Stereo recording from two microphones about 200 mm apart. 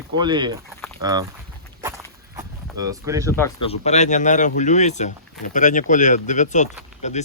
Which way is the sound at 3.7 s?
35° left (ahead or behind).